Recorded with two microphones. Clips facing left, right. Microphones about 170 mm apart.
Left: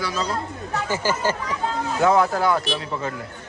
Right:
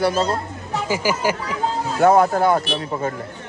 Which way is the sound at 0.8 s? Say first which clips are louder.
Right 3 dB; 10° right (ahead or behind).